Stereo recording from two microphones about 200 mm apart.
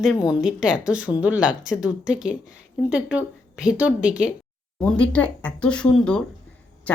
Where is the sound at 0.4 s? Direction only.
5° right (ahead or behind).